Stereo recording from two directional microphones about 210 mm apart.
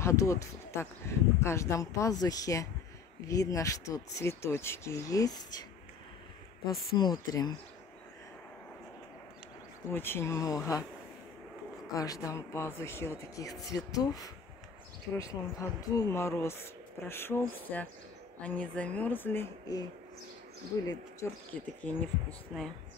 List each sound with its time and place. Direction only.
0.0 s speech: 15° left (ahead or behind)
7.0 s speech: 20° left (ahead or behind)
9.8 s speech: 10° left (ahead or behind)
11.9 s speech: 15° left (ahead or behind)
21.2 s speech: 10° left (ahead or behind)